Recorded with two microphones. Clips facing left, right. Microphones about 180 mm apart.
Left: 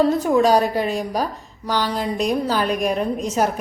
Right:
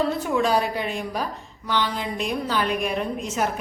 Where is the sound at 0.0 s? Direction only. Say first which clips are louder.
Left 6 dB; 40° left (ahead or behind).